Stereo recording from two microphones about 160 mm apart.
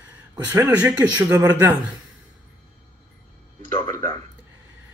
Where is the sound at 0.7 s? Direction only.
10° right (ahead or behind).